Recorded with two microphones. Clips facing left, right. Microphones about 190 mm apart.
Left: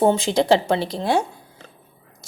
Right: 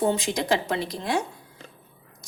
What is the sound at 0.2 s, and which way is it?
A woman's voice, 30° left (ahead or behind).